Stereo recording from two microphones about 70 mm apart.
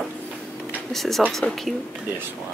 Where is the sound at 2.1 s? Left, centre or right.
Right.